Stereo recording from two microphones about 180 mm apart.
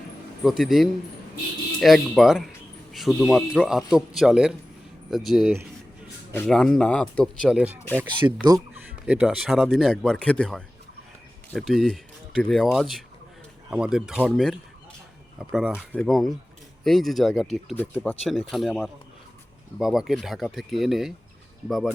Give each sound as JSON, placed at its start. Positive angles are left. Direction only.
{"t": 0.4, "sound": "speech", "side_deg": 0}
{"t": 8.4, "sound": "speech", "side_deg": -20}
{"t": 9.0, "sound": "speech", "side_deg": -5}